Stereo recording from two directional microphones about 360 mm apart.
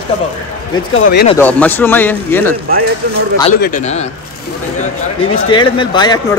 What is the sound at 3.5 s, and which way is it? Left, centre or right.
A man's voice, left.